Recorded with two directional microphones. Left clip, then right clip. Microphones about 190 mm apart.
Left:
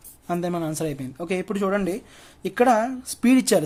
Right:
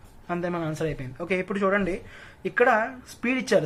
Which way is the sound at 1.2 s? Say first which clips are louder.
Even; 30° left (ahead or behind).